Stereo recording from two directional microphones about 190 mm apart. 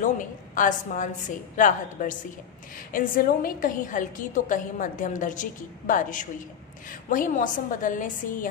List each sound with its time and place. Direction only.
0.0 s a woman's voice: 45° left (ahead or behind)